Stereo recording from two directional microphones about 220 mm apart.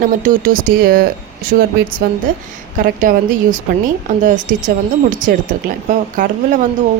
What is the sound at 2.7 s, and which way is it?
Speech, 40° right (ahead or behind).